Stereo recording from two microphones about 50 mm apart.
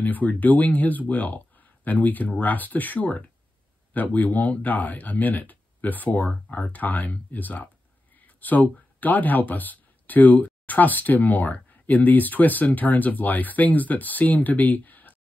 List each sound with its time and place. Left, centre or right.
0.0 s speech: left